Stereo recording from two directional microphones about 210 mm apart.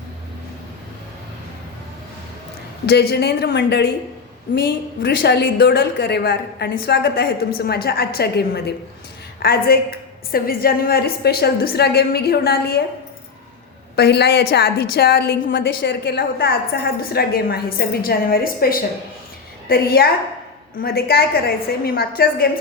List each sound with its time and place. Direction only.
2.8 s a woman's voice: 50° left (ahead or behind)
5.0 s a woman's voice: 55° left (ahead or behind)
13.9 s a woman's voice: 50° left (ahead or behind)
15.5 s a woman's voice: 60° left (ahead or behind)